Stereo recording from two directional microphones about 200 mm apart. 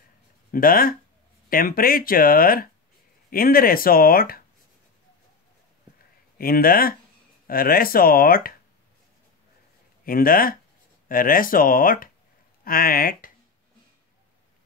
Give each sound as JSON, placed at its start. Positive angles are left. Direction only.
{"t": 0.5, "sound": "speech", "side_deg": 45}
{"t": 6.3, "sound": "speech", "side_deg": 45}
{"t": 10.0, "sound": "speech", "side_deg": 45}